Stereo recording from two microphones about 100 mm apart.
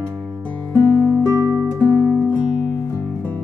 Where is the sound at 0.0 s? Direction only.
25° right (ahead or behind).